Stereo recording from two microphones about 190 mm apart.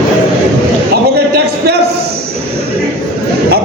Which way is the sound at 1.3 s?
60° right (ahead or behind).